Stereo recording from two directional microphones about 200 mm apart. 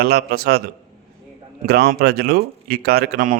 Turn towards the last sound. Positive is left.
turn(degrees=-45)  # may be behind; listen again after turning